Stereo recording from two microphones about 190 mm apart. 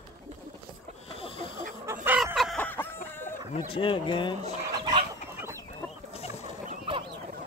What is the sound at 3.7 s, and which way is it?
Speech, 25° left (ahead or behind).